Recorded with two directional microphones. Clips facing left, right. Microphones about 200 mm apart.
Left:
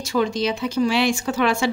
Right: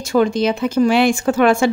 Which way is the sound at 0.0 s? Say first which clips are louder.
Right 6 dB; 50° right (ahead or behind).